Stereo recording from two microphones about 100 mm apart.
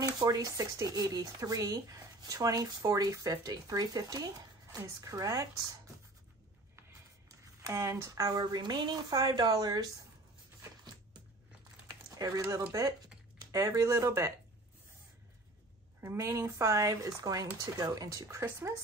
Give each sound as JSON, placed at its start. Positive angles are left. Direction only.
{"t": 0.0, "sound": "speech", "side_deg": -40}
{"t": 7.2, "sound": "speech", "side_deg": -30}
{"t": 12.2, "sound": "speech", "side_deg": -35}
{"t": 16.0, "sound": "speech", "side_deg": -25}